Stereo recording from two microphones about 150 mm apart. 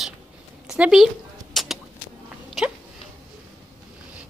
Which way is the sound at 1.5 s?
Centre (ahead or behind).